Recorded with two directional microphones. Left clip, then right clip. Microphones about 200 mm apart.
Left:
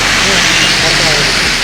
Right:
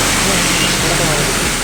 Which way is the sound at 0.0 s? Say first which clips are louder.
Left 5 dB; 60° right (ahead or behind).